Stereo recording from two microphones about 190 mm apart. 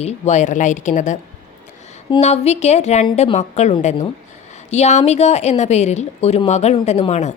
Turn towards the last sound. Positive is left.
turn(degrees=35)  # may be behind; listen again after turning